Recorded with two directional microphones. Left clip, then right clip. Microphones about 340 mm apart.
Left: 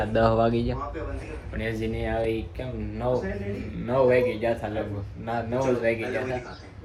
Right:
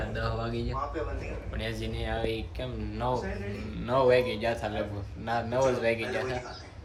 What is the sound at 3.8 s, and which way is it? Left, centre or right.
Speech, centre.